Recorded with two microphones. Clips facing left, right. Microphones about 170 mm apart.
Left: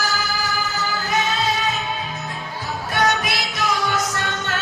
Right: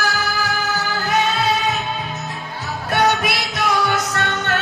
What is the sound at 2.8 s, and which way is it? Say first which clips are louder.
Music: right 3 dB; 60° right (ahead or behind).